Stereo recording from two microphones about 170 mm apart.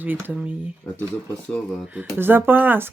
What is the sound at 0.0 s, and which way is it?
Speech, 10° right (ahead or behind).